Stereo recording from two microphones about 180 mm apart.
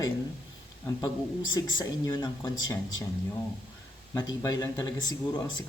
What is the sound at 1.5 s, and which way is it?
Speech, 20° left (ahead or behind).